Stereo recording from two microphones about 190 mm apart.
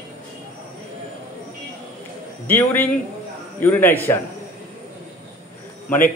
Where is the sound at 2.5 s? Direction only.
10° left (ahead or behind).